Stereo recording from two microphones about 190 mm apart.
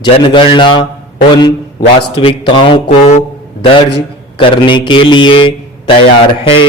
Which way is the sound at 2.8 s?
35° left (ahead or behind).